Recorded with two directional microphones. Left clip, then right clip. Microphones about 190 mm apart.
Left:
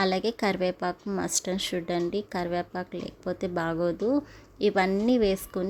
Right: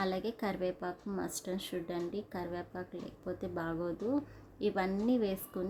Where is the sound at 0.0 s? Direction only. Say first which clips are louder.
Left 10 dB; 35° left (ahead or behind).